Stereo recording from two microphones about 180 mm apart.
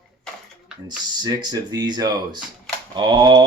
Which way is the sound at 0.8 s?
25° right (ahead or behind).